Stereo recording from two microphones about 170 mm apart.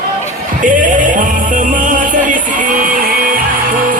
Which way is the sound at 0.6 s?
50° right (ahead or behind).